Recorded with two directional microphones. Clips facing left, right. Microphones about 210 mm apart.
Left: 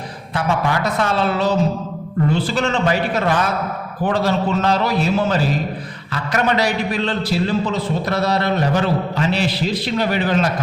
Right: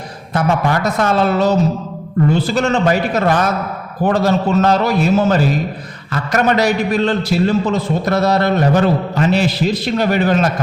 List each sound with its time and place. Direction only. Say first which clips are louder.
0.3 s a man's voice: right 4 dB; 45° right (ahead or behind)